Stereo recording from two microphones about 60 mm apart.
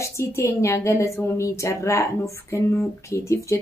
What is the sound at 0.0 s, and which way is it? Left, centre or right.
A woman's voice, left.